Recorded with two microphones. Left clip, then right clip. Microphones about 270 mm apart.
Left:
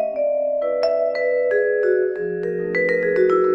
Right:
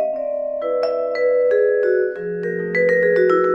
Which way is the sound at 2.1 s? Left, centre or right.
Centre.